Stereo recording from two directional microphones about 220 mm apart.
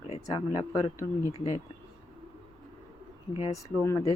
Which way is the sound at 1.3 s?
30° left (ahead or behind).